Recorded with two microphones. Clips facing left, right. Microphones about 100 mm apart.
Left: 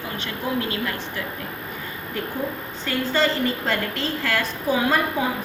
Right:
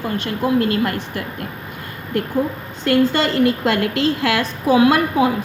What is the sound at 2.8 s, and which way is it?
A woman's voice, 65° right (ahead or behind).